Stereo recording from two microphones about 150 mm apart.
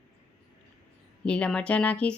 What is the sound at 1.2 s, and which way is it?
Speech, 5° left (ahead or behind).